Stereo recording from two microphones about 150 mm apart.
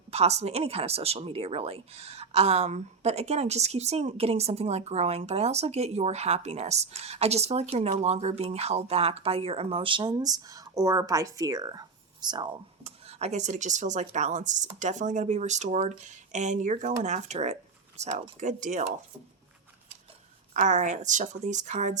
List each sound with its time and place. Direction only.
0.1 s speech: 45° right (ahead or behind); by 12.5 s 30° right (ahead or behind)
12.8 s speech: 45° right (ahead or behind)
20.5 s speech: 55° right (ahead or behind)